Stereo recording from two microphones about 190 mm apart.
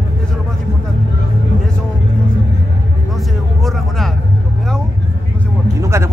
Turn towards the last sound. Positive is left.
turn(degrees=-15)  # may be behind; listen again after turning